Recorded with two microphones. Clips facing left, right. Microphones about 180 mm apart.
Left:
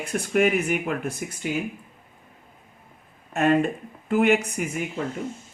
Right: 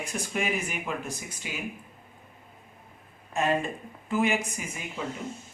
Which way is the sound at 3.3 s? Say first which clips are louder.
Left 6 dB; 60° left (ahead or behind).